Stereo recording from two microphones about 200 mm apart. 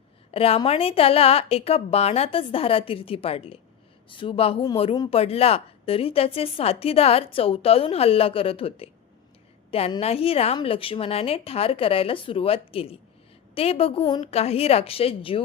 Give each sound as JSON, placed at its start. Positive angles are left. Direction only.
{"t": 0.3, "sound": "speech", "side_deg": 30}